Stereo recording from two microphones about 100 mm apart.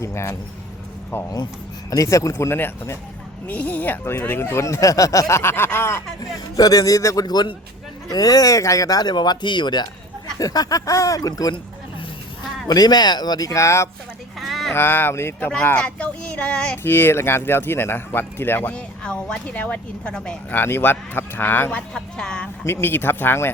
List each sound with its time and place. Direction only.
0.0 s speech: 25° left (ahead or behind)
4.6 s speech: 35° left (ahead or behind)
5.3 s speech: 25° left (ahead or behind)
6.6 s speech: 40° left (ahead or behind)
12.6 s speech: 40° left (ahead or behind)
14.4 s a sound: centre (ahead or behind)
14.7 s speech: 20° left (ahead or behind)
15.7 s speech: 10° left (ahead or behind)
16.7 s speech: 20° left (ahead or behind)
18.7 s speech: 10° left (ahead or behind)
22.6 s speech: 25° left (ahead or behind)